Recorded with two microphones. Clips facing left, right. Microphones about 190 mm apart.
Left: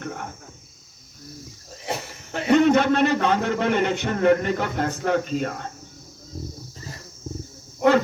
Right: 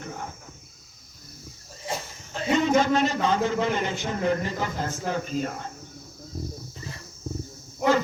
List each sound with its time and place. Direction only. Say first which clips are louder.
1.8 s a man's voice: left 3 dB; 65° left (ahead or behind)